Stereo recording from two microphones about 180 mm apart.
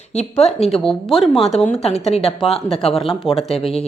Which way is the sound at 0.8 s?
Centre (ahead or behind).